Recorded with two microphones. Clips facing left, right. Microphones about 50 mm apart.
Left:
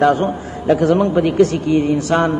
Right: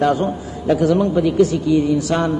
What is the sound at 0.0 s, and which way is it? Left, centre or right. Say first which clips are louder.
A man's voice: left 3 dB; left.